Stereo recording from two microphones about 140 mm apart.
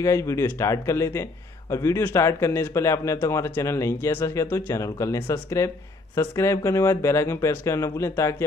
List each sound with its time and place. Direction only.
0.0 s a man's voice: 20° left (ahead or behind)